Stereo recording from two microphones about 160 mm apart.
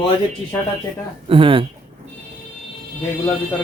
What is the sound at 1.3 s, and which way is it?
Speech, 35° right (ahead or behind).